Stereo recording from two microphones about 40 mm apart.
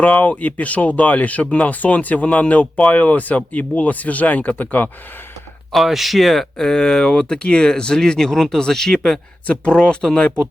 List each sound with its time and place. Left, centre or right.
0.0 s speech: left
5.7 s speech: centre
9.5 s speech: left